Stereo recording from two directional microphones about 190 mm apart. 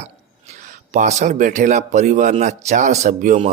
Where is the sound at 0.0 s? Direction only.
35° right (ahead or behind).